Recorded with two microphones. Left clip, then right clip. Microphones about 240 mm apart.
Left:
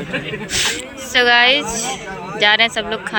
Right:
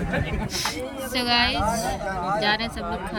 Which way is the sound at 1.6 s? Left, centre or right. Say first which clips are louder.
Left 1 dB; centre.